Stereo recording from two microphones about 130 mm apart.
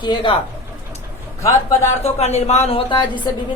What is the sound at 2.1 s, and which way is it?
Speech, 55° left (ahead or behind).